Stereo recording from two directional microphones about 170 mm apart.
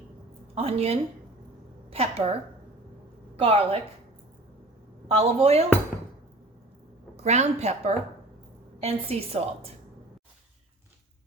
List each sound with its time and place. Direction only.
0.5 s a woman's voice: 35° right (ahead or behind)
3.3 s a woman's voice: 35° right (ahead or behind)
5.0 s a woman's voice: 40° right (ahead or behind)
7.2 s a woman's voice: 40° right (ahead or behind)